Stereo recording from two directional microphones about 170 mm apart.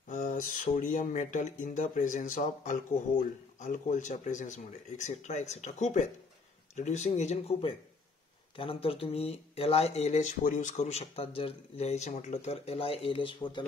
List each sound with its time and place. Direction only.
0.1 s speech: 50° left (ahead or behind); by 13.7 s 30° left (ahead or behind)